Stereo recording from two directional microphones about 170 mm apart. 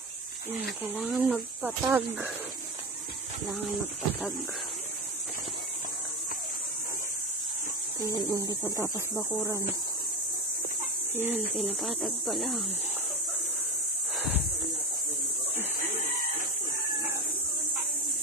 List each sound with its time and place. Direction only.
0.8 s speech: 5° right (ahead or behind)
8.3 s speech: 15° right (ahead or behind)
11.1 s speech: 10° right (ahead or behind)
11.5 s speech: centre (ahead or behind)
14.1 s a sound: centre (ahead or behind)